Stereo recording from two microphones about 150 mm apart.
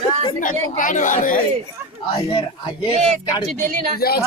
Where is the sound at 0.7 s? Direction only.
60° left (ahead or behind).